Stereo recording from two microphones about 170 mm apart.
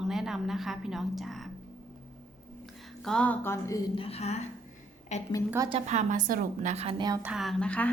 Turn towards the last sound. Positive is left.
turn(degrees=5)  # may be behind; listen again after turning